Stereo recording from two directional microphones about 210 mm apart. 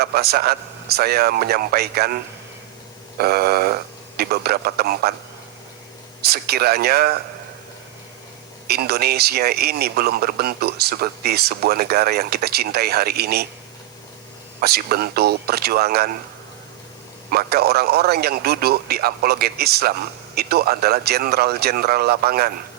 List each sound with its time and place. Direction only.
0.0 s a man's voice: 50° right (ahead or behind)
3.2 s a man's voice: 45° right (ahead or behind)
6.2 s a man's voice: 50° right (ahead or behind)
8.6 s a man's voice: 50° right (ahead or behind)
14.6 s a man's voice: 50° right (ahead or behind)
17.3 s a man's voice: 50° right (ahead or behind)